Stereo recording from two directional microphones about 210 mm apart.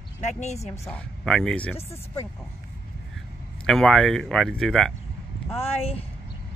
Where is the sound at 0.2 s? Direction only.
35° left (ahead or behind).